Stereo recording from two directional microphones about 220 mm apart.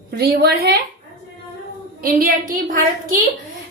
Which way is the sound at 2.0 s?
40° right (ahead or behind).